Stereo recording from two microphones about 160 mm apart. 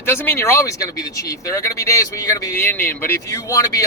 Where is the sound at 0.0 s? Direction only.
15° left (ahead or behind).